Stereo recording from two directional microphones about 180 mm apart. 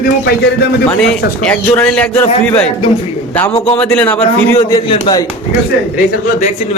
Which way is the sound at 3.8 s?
10° left (ahead or behind).